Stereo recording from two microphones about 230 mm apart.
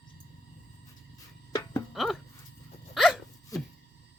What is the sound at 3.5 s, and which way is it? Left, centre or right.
Music, centre.